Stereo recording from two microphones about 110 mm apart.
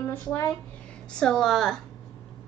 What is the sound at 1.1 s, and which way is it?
Speech, 5° left (ahead or behind).